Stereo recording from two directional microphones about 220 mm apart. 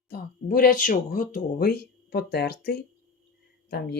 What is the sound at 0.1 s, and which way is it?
Speech, 40° left (ahead or behind).